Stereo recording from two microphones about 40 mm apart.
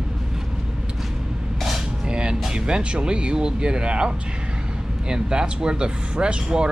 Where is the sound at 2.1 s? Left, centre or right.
Right.